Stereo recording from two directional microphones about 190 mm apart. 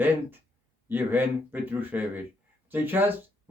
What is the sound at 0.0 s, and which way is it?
Speech, 10° right (ahead or behind).